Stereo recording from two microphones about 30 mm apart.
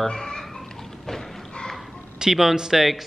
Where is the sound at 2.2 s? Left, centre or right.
Centre.